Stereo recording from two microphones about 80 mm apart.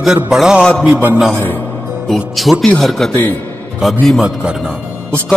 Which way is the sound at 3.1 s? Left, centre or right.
Left.